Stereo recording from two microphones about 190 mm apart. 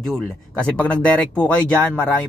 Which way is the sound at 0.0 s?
Centre (ahead or behind).